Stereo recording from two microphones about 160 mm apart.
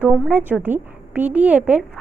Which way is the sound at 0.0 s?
10° right (ahead or behind).